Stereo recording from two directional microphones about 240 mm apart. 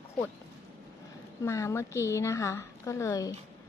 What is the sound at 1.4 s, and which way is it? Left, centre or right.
A woman's voice, centre.